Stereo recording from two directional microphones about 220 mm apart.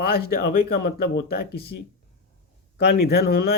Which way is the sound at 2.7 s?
45° left (ahead or behind).